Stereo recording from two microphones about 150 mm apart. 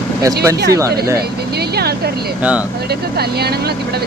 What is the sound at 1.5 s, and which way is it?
Speech, 90° right.